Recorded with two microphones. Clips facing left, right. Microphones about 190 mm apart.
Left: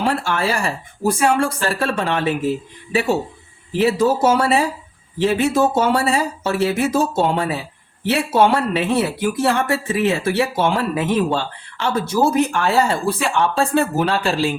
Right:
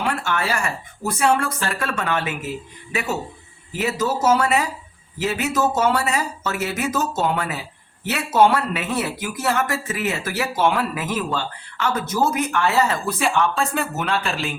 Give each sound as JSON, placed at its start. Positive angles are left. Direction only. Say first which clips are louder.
{"t": 0.0, "sound": "speech", "louder": "left 4 dB", "side_deg": 30}